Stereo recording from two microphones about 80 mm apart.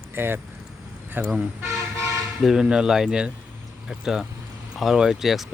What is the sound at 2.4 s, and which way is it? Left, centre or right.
Speech, centre.